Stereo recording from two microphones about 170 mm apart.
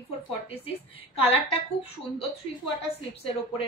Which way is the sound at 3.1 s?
35° left (ahead or behind).